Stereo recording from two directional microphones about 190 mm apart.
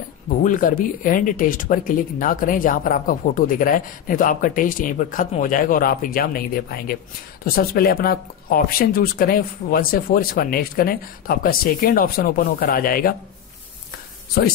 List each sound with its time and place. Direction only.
0.4 s speech: 45° left (ahead or behind)
7.4 s speech: 50° left (ahead or behind)